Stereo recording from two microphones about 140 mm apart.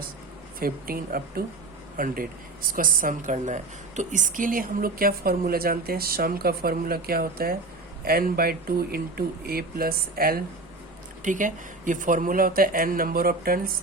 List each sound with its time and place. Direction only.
0.6 s speech: 90° right
11.2 s speech: 65° right (ahead or behind); by 13.7 s 90° right